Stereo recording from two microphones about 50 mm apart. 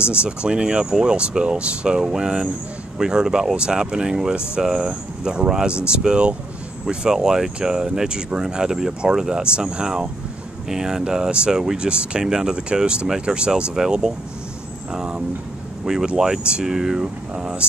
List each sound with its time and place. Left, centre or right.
0.2 s speech: centre